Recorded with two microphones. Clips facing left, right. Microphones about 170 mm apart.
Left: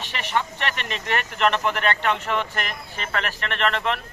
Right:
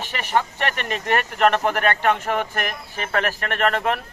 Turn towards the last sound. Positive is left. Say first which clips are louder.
# right 3 dB
turn(degrees=-45)  # may be behind; listen again after turning